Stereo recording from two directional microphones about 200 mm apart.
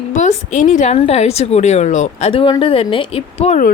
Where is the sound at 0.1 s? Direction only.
35° left (ahead or behind).